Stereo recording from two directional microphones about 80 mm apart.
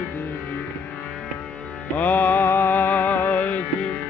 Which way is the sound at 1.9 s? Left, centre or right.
Left.